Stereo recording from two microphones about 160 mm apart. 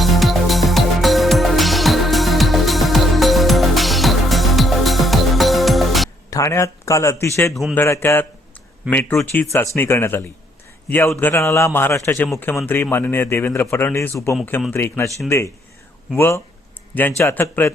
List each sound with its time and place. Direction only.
0.0 s music: centre (ahead or behind)
6.3 s a man's voice: 20° left (ahead or behind)
7.5 s speech: centre (ahead or behind)
7.8 s a man's voice: 15° left (ahead or behind)
16.1 s a man's voice: 15° left (ahead or behind)